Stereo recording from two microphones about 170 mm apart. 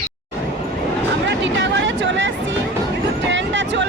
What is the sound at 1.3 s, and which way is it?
Hubbub, 90° right.